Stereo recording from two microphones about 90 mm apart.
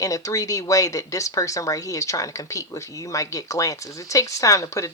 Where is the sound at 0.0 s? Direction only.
40° left (ahead or behind).